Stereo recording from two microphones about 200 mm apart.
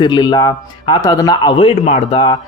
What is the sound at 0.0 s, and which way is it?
A man's voice, 20° left (ahead or behind).